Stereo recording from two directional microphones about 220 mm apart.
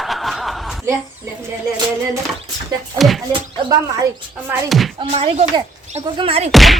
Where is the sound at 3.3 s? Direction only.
15° right (ahead or behind).